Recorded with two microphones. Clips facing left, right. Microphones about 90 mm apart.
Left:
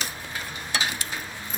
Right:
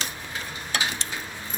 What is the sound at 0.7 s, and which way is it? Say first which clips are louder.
Stir: even; 15° left (ahead or behind).